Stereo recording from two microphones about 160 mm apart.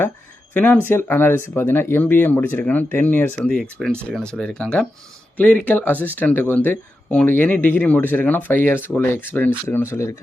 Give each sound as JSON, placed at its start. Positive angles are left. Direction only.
{"t": 0.5, "sound": "speech", "side_deg": 10}